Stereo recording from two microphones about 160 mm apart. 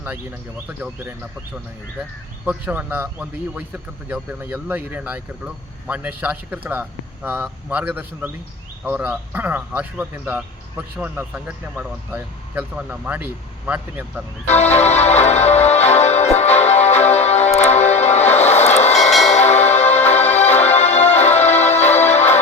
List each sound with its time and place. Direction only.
0.0 s a man's voice: 10° right (ahead or behind)
2.4 s a man's voice: 10° right (ahead or behind)
14.5 s music: 45° left (ahead or behind)